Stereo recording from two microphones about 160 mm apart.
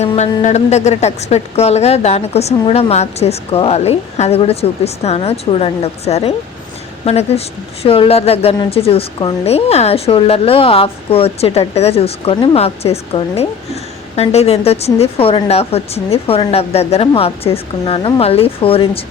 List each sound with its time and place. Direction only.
0.0 s a woman's voice: 45° left (ahead or behind)